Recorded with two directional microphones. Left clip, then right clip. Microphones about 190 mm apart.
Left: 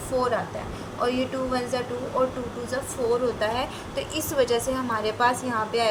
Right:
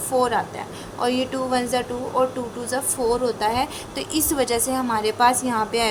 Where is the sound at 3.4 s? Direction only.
50° right (ahead or behind).